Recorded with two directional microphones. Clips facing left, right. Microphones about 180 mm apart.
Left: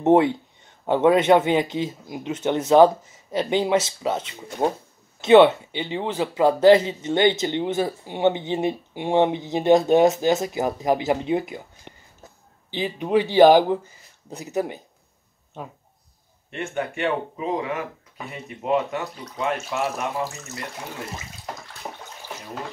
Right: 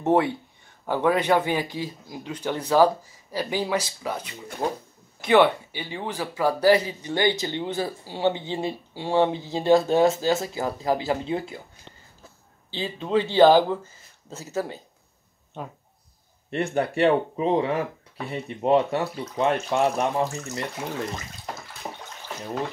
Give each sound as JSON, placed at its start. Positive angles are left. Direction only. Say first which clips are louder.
{"t": 0.0, "sound": "speech", "louder": "left 4 dB", "side_deg": 20}
{"t": 16.4, "sound": "speech", "louder": "right 4 dB", "side_deg": -35}
{"t": 20.2, "sound": "speech", "louder": "right 4 dB", "side_deg": 5}
{"t": 21.8, "sound": "bathtub", "louder": "even", "side_deg": 5}